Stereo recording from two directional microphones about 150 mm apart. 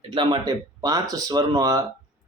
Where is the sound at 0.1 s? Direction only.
35° right (ahead or behind).